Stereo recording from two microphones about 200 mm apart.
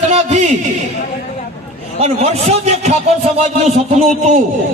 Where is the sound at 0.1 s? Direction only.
35° right (ahead or behind).